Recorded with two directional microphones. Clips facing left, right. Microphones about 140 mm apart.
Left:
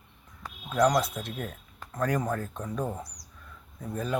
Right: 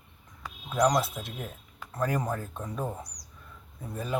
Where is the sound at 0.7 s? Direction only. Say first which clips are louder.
Left 1 dB; 15° right (ahead or behind).